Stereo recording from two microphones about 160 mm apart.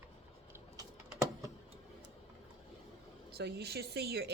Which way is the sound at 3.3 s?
90° right.